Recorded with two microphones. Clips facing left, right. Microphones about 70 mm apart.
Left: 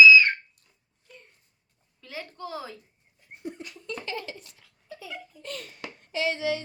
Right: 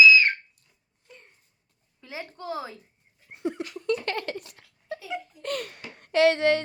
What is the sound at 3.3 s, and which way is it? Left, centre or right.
Laughter, right.